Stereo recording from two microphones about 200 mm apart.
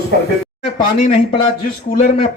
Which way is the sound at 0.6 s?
35° left (ahead or behind).